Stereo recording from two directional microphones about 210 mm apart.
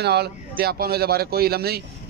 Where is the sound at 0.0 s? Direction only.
50° right (ahead or behind).